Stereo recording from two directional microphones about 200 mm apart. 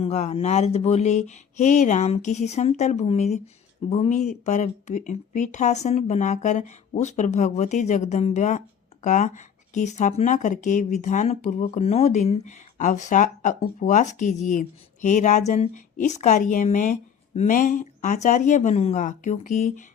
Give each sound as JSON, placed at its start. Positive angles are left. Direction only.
{"t": 0.0, "sound": "speech", "side_deg": 35}